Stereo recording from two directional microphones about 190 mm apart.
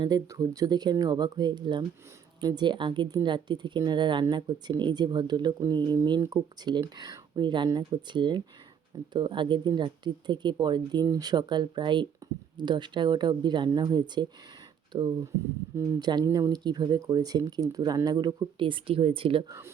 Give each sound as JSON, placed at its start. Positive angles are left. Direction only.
{"t": 0.0, "sound": "speech", "side_deg": -20}